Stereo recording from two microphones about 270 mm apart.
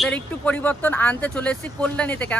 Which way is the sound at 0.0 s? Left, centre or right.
Centre.